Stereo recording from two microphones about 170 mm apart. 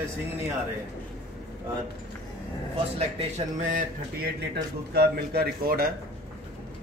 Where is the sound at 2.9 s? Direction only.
40° right (ahead or behind).